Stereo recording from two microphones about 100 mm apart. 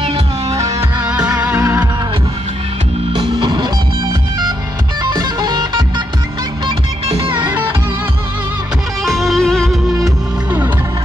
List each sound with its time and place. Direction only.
0.0 s music: 70° right (ahead or behind)
1.0 s music: 10° right (ahead or behind)
3.1 s music: 55° right (ahead or behind)
5.1 s music: 45° right (ahead or behind)
7.1 s music: 65° right (ahead or behind)
9.0 s music: centre (ahead or behind)